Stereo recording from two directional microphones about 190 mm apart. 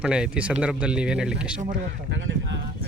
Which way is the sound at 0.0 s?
5° right (ahead or behind).